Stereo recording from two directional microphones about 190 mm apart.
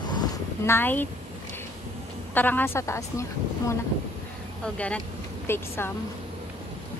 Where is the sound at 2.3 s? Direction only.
10° left (ahead or behind).